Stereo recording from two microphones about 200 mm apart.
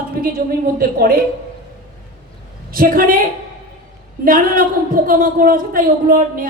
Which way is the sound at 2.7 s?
45° right (ahead or behind).